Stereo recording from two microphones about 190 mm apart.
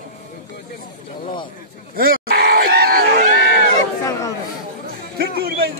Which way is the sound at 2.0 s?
55° right (ahead or behind).